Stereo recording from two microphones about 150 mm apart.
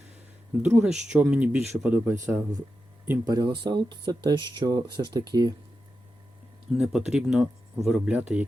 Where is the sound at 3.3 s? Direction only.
30° right (ahead or behind).